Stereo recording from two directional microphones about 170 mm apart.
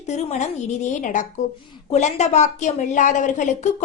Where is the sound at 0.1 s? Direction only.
40° left (ahead or behind).